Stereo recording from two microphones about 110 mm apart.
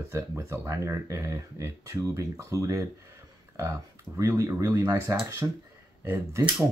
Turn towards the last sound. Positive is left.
turn(degrees=-20)  # may be behind; listen again after turning